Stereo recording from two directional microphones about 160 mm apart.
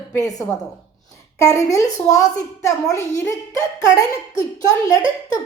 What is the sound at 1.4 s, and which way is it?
A woman's voice, 20° left (ahead or behind).